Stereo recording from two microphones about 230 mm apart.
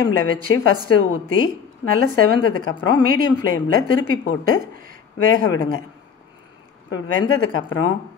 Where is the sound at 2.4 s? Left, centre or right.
Left.